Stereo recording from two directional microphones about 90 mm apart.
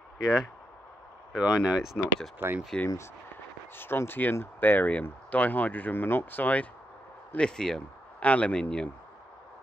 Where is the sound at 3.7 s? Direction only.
25° left (ahead or behind).